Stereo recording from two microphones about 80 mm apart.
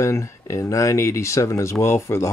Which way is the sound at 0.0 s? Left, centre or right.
Left.